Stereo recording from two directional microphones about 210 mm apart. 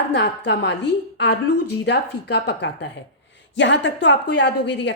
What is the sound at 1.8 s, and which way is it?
A woman's voice, 55° left (ahead or behind).